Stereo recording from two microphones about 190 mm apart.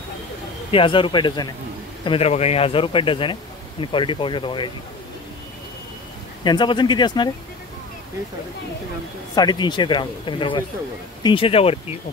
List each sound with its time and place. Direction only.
0.7 s speech: 25° left (ahead or behind)
6.4 s speech: 25° left (ahead or behind)
9.3 s speech: 20° left (ahead or behind)